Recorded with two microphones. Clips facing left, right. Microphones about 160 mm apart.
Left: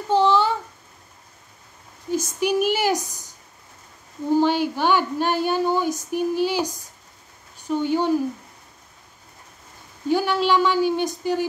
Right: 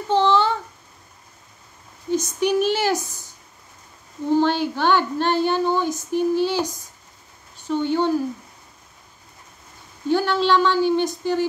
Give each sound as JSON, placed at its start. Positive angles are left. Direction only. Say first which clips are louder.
{"t": 0.1, "sound": "a sound", "louder": "even", "side_deg": 10}
{"t": 2.0, "sound": "speech", "louder": "right 2 dB", "side_deg": 10}
{"t": 4.3, "sound": "speech", "louder": "even", "side_deg": 10}
{"t": 10.0, "sound": "speech", "louder": "right 1 dB", "side_deg": 10}